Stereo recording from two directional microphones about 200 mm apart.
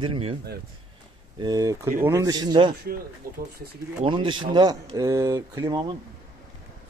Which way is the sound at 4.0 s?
25° right (ahead or behind).